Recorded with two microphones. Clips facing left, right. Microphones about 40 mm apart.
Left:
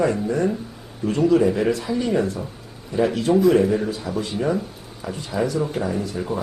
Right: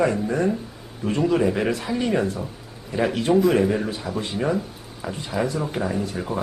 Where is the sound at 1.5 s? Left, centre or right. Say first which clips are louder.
Left 2 dB; right.